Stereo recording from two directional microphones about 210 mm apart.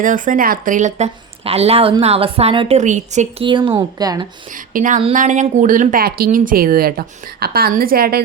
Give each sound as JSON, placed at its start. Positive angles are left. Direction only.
{"t": 0.0, "sound": "speech", "side_deg": -40}
{"t": 3.4, "sound": "speech", "side_deg": -20}
{"t": 4.7, "sound": "speech", "side_deg": -40}